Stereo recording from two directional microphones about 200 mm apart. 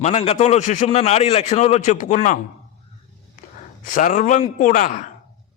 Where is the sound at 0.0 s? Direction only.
35° left (ahead or behind).